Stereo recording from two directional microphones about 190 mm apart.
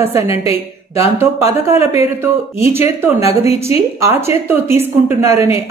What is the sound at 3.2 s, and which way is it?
Speech, 35° left (ahead or behind).